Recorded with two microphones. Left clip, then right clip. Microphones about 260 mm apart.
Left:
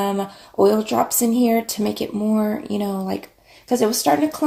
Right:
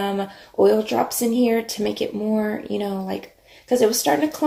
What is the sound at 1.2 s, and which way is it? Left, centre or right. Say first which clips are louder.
Speech: left 1 dB; left.